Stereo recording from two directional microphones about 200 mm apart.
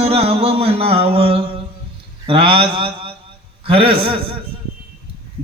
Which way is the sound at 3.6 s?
30° right (ahead or behind).